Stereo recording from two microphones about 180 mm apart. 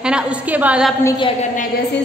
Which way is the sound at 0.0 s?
5° right (ahead or behind).